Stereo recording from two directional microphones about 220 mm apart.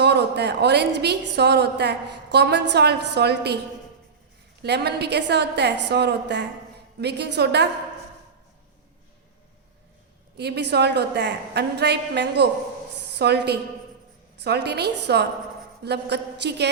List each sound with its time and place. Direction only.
0.0 s a woman's voice: 50° right (ahead or behind)
4.6 s a woman's voice: 50° right (ahead or behind)
10.3 s a woman's voice: 50° right (ahead or behind)